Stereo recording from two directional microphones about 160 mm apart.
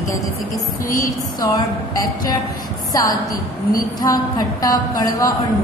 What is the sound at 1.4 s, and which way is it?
A woman's voice, 20° left (ahead or behind).